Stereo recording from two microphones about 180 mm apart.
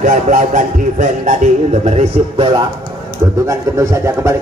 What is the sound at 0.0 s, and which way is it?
Speech, 45° right (ahead or behind).